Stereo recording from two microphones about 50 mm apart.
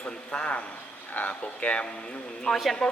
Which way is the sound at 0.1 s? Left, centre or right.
Centre.